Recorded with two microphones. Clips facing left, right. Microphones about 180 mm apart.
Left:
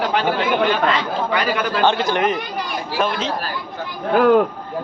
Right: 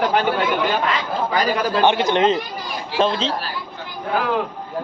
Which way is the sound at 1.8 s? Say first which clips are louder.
Right 2 dB; 20° right (ahead or behind).